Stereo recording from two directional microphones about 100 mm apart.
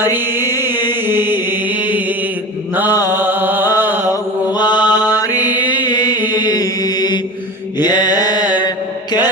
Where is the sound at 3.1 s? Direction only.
20° right (ahead or behind).